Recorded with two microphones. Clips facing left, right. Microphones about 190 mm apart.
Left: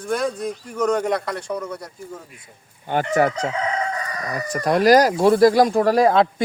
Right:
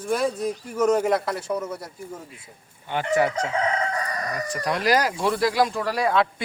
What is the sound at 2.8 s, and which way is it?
Speech, 45° left (ahead or behind).